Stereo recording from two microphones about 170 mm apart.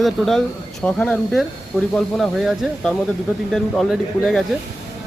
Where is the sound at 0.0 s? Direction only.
Centre (ahead or behind).